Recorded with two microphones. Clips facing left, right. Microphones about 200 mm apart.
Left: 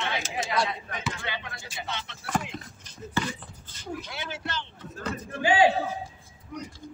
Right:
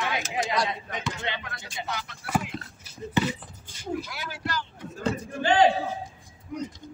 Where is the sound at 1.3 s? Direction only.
25° right (ahead or behind).